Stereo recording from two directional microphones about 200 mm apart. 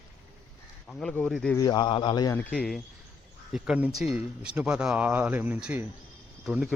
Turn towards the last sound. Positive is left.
turn(degrees=-5)  # may be behind; listen again after turning